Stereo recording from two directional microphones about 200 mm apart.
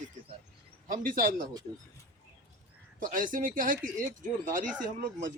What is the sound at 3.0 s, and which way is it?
Speech, 45° right (ahead or behind).